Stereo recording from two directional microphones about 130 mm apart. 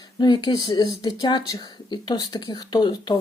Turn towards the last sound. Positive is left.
turn(degrees=35)  # may be behind; listen again after turning